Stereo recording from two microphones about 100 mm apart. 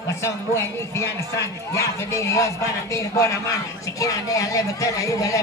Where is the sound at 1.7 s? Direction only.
30° left (ahead or behind).